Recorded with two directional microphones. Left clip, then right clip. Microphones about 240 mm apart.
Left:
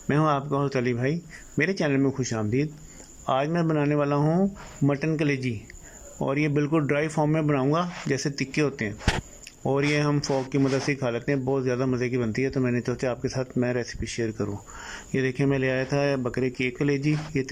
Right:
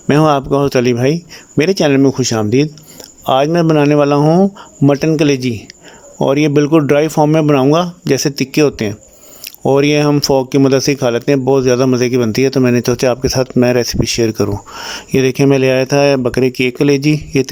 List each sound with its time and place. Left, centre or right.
0.1 s speech: right